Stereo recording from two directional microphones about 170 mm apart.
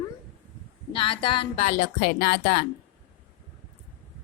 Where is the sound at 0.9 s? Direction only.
30° left (ahead or behind).